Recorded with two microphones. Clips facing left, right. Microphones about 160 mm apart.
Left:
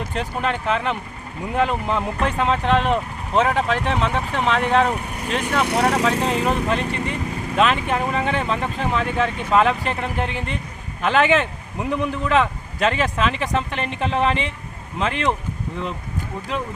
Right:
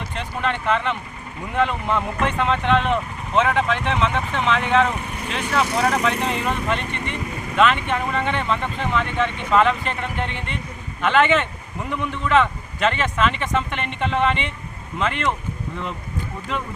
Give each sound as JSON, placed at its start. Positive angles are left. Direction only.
{"t": 0.0, "sound": "speech", "side_deg": 40}